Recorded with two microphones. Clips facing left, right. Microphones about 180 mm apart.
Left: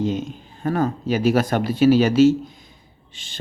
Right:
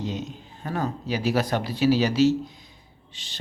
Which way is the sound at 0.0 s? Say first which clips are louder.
Left 7 dB; 50° left (ahead or behind).